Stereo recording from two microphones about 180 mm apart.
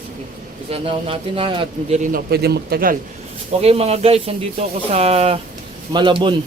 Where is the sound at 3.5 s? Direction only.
35° right (ahead or behind).